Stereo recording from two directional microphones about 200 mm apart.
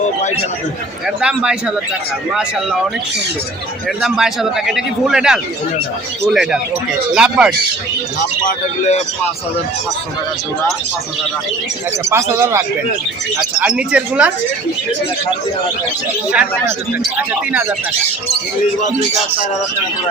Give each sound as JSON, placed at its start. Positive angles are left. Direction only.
{"t": 1.0, "sound": "a man's voice", "side_deg": -5}
{"t": 4.0, "sound": "a man's voice", "side_deg": 0}
{"t": 8.4, "sound": "speech", "side_deg": 35}
{"t": 12.0, "sound": "a man's voice", "side_deg": -15}
{"t": 16.3, "sound": "a man's voice", "side_deg": -5}